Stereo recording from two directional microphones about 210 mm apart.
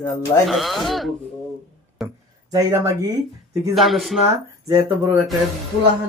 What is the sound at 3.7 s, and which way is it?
Speech, centre (ahead or behind).